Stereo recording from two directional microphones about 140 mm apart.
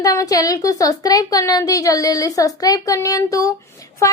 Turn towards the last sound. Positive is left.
turn(degrees=25)  # may be behind; listen again after turning